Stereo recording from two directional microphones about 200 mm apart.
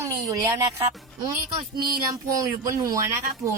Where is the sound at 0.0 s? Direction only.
15° right (ahead or behind).